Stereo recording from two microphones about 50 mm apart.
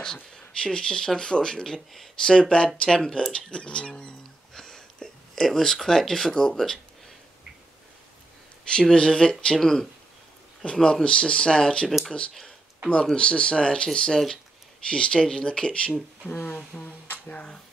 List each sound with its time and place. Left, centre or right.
0.0 s speech: centre
8.6 s speech: centre
13.1 s speech: centre